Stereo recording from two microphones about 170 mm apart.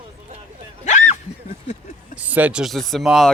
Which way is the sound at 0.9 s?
45° left (ahead or behind).